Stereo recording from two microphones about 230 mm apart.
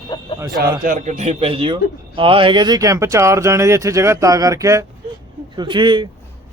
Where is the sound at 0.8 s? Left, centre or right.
Right.